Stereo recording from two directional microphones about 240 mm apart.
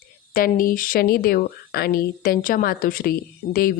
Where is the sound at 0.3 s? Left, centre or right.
Left.